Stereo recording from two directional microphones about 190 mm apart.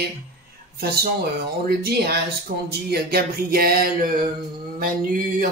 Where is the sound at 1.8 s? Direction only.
55° right (ahead or behind).